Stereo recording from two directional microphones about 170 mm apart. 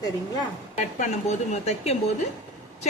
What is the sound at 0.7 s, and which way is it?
A woman's voice, 45° left (ahead or behind).